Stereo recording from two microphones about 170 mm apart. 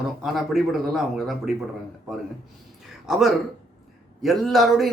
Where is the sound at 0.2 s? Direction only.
Centre (ahead or behind).